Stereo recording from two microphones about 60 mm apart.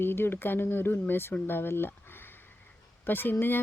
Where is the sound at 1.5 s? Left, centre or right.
Left.